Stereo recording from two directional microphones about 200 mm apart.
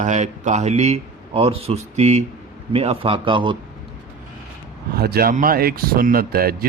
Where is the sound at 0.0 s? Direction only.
35° right (ahead or behind).